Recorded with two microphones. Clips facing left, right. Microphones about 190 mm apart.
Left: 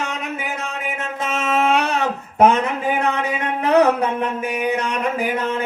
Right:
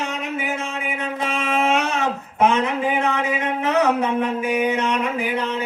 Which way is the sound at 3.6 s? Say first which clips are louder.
Left 6 dB; 35° left (ahead or behind).